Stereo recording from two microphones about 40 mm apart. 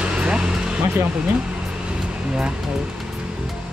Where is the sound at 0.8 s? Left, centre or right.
Right.